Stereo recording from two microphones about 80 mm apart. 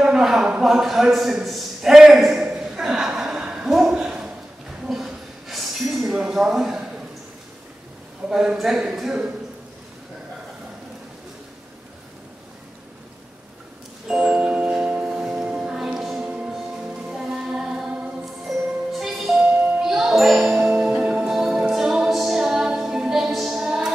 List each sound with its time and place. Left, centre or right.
0.0 s a man's voice: centre
2.5 s a sound: centre
8.3 s a man's voice: centre
14.0 s music: centre
17.1 s female singing: centre
18.5 s music: centre
19.4 s music: centre
20.4 s marimba: centre
21.3 s music: centre